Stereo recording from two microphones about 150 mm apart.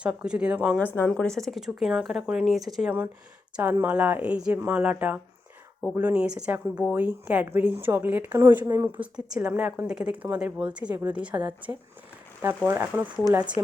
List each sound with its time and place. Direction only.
0.0 s a woman's voice: 5° right (ahead or behind)
0.8 s a woman's voice: 15° left (ahead or behind); by 9.0 s 20° right (ahead or behind)
9.1 s a woman's voice: 5° right (ahead or behind)